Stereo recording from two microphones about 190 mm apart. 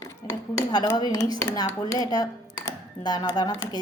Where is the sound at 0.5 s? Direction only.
20° left (ahead or behind).